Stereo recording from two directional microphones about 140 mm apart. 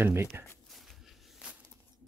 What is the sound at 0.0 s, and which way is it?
Speech, 20° right (ahead or behind).